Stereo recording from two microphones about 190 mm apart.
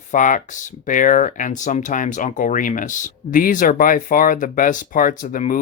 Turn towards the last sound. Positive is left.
turn(degrees=40)  # may be behind; listen again after turning